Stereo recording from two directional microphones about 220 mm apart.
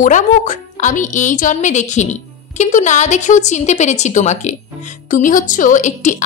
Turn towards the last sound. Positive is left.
turn(degrees=35)  # may be behind; listen again after turning